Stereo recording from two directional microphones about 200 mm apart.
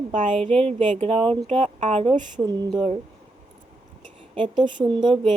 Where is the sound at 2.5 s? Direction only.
20° right (ahead or behind).